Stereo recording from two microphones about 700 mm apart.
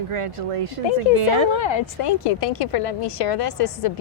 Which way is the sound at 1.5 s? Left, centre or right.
Left.